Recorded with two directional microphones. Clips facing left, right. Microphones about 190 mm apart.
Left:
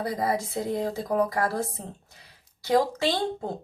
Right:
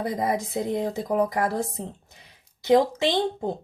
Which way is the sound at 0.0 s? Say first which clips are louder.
Right 1 dB; 20° right (ahead or behind).